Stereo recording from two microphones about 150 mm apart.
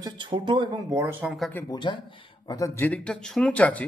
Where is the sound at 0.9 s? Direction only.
15° right (ahead or behind).